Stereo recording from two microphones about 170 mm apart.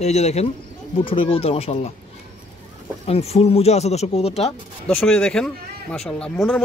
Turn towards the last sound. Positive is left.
turn(degrees=0)  # may be behind; listen again after turning